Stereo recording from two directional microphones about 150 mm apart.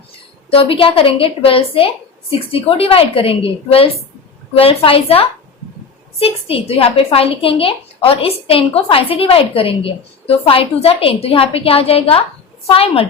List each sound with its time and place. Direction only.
0.5 s a woman's voice: 35° left (ahead or behind)